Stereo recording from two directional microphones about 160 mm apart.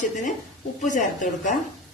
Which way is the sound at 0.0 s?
50° left (ahead or behind).